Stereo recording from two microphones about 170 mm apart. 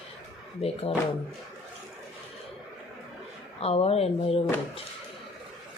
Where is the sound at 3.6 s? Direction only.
35° left (ahead or behind).